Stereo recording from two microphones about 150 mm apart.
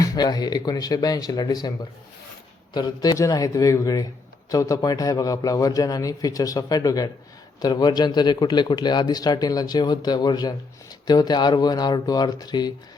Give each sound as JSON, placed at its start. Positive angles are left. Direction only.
{"t": 0.0, "sound": "a man's voice", "side_deg": 25}